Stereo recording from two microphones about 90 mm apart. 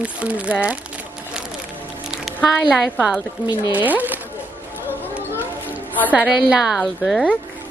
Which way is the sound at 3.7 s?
20° right (ahead or behind).